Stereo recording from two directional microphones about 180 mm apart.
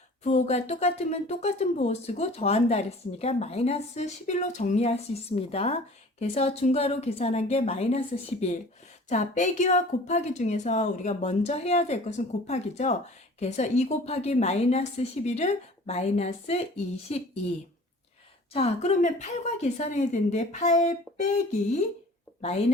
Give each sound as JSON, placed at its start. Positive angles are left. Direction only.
{"t": 0.3, "sound": "speech", "side_deg": 40}
{"t": 18.5, "sound": "speech", "side_deg": 35}